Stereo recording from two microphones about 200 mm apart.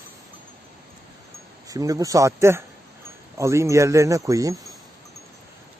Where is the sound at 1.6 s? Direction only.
15° right (ahead or behind).